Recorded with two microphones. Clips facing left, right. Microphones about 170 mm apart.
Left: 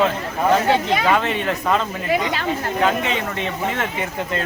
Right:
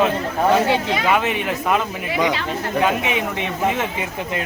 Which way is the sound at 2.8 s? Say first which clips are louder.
Even; 15° right (ahead or behind).